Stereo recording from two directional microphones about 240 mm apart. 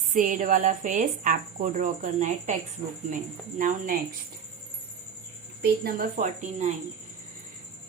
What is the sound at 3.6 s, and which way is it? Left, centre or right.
Speech, right.